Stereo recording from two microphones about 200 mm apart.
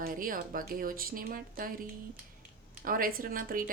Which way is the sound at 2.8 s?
45° right (ahead or behind).